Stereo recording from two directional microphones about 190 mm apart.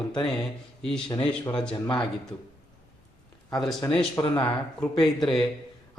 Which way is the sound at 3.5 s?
Centre (ahead or behind).